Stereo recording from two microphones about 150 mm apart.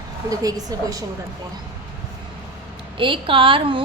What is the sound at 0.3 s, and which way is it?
Speech, 25° right (ahead or behind).